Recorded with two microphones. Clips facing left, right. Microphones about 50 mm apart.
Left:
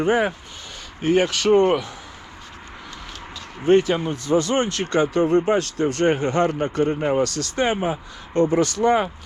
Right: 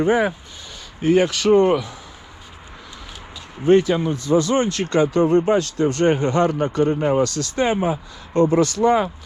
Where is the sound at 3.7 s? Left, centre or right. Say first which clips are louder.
Right 2 dB; left.